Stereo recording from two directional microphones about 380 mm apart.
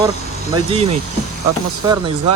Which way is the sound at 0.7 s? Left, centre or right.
Centre.